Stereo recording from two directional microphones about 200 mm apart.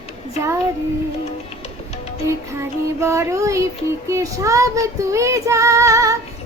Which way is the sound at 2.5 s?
15° right (ahead or behind).